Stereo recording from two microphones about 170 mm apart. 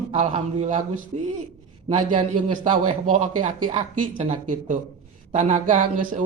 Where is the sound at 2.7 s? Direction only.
45° right (ahead or behind).